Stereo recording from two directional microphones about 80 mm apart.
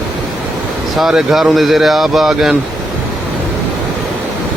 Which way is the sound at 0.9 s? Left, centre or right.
Centre.